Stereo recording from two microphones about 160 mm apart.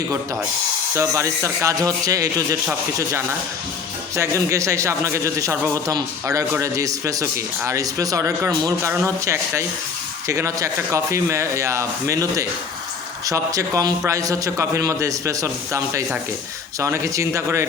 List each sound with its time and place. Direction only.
0.9 s speech: 20° right (ahead or behind)
4.1 s speech: 20° right (ahead or behind)